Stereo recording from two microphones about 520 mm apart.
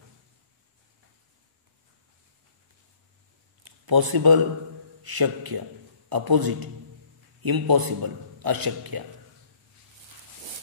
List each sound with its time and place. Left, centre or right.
3.6 s a man's voice: right